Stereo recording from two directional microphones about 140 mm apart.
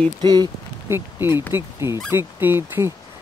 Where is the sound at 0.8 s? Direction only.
15° right (ahead or behind).